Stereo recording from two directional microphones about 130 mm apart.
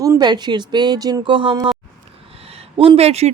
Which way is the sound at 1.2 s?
40° right (ahead or behind).